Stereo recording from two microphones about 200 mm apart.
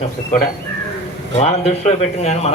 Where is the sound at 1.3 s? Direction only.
35° left (ahead or behind).